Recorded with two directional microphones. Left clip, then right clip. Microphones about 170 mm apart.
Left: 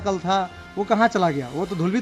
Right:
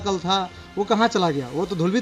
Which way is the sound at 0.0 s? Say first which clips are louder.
Even; 30° left (ahead or behind).